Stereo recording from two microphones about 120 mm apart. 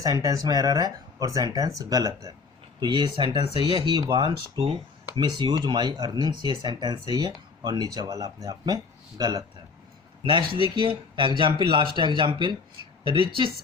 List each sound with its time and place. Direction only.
0.0 s speech: 30° right (ahead or behind)
10.2 s speech: 45° right (ahead or behind)